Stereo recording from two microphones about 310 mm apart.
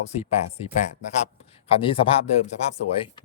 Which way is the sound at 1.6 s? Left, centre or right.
Centre.